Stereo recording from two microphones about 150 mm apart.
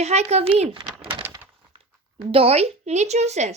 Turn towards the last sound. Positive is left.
turn(degrees=-50)  # may be behind; listen again after turning